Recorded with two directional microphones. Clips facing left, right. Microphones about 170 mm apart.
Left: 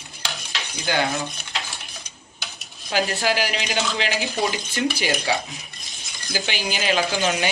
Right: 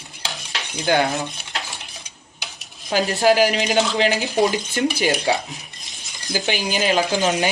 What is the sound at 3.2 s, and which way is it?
Speech, 45° right (ahead or behind).